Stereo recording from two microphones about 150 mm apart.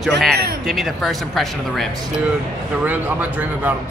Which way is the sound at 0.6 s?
Centre (ahead or behind).